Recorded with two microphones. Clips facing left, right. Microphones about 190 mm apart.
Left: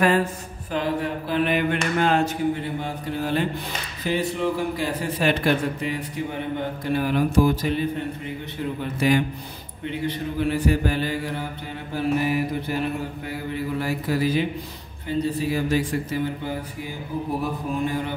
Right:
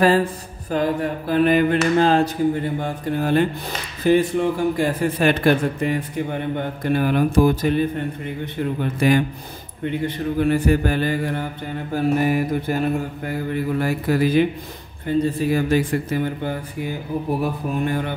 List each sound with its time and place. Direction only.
0.0 s mantra: 35° right (ahead or behind)
2.8 s a man's voice: 50° right (ahead or behind)
9.0 s a man's voice: 50° right (ahead or behind)